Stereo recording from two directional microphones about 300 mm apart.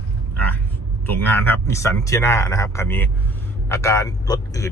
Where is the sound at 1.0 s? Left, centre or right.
Centre.